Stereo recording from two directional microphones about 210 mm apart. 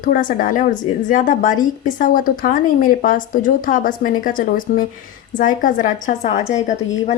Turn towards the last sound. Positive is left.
turn(degrees=35)  # may be behind; listen again after turning